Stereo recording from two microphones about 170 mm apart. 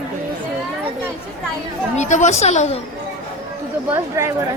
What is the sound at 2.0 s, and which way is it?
Speech, 45° left (ahead or behind).